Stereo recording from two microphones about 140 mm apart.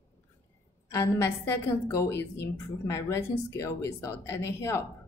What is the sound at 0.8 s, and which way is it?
A woman's voice, 20° left (ahead or behind).